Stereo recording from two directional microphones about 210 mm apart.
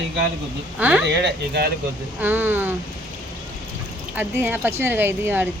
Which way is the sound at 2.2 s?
10° right (ahead or behind).